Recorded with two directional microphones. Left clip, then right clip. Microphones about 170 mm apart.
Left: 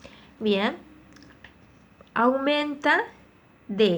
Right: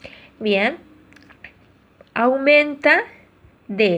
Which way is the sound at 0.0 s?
20° right (ahead or behind).